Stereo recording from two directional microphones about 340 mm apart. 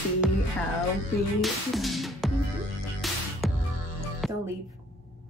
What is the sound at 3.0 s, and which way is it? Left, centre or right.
Music, centre.